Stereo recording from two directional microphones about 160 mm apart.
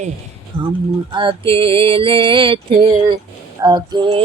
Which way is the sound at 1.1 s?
30° right (ahead or behind).